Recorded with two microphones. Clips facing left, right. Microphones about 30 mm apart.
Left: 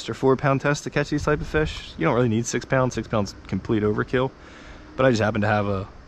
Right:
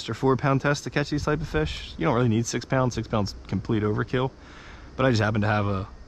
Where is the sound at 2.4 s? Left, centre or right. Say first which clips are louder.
Left 2 dB; centre.